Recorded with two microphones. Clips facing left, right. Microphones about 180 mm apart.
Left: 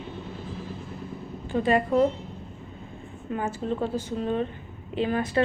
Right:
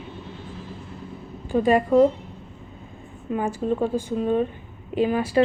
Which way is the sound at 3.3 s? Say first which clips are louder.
Right 5 dB; 15° right (ahead or behind).